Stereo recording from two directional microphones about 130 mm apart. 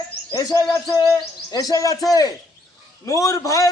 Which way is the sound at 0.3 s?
30° left (ahead or behind).